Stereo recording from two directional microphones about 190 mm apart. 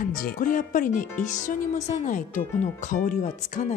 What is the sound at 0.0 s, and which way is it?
Speech, 45° left (ahead or behind).